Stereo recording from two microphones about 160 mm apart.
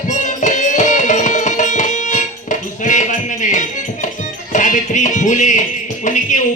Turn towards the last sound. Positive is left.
turn(degrees=50)  # may be behind; listen again after turning